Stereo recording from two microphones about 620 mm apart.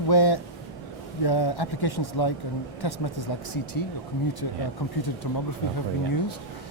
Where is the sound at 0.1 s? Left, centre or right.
Left.